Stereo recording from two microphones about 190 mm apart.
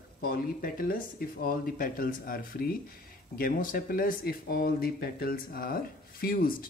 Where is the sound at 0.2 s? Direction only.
50° left (ahead or behind).